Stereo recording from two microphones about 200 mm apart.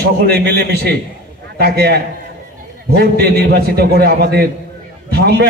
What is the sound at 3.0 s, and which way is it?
A man's voice, 55° right (ahead or behind).